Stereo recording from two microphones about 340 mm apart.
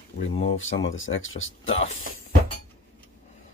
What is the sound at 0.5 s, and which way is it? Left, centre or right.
Speech, left.